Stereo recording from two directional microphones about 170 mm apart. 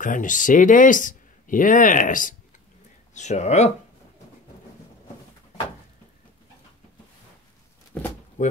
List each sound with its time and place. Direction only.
0.0 s speech: 50° left (ahead or behind)